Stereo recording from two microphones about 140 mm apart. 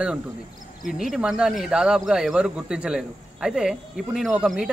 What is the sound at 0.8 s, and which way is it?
Speech, 5° right (ahead or behind).